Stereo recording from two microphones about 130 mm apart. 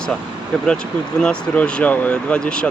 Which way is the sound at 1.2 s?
5° left (ahead or behind).